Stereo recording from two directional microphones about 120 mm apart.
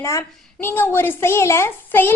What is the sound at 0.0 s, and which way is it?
A woman's voice, 25° left (ahead or behind).